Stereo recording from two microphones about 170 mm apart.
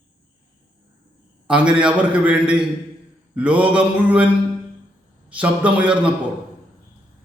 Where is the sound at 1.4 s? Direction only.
5° right (ahead or behind).